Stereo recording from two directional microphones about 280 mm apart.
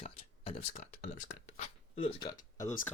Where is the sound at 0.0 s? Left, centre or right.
Left.